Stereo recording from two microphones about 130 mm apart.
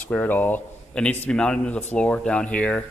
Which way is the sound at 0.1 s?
15° left (ahead or behind).